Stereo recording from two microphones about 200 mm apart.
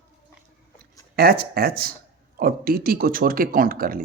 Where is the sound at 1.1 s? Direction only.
50° right (ahead or behind).